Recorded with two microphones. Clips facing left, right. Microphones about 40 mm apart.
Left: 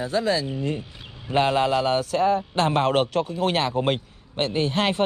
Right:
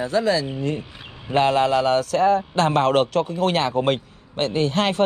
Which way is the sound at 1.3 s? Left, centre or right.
Right.